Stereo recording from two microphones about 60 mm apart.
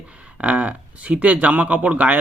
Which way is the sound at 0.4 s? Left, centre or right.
Right.